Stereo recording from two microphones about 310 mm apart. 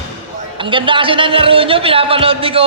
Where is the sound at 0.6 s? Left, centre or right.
Centre.